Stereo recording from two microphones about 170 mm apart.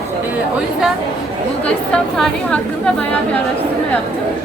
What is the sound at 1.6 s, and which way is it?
A woman's voice, 5° left (ahead or behind).